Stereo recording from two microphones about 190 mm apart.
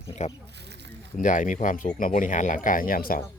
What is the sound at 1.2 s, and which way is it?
Speech, 40° left (ahead or behind).